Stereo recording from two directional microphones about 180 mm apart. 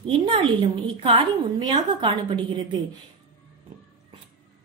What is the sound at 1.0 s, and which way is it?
A woman's voice, 25° right (ahead or behind).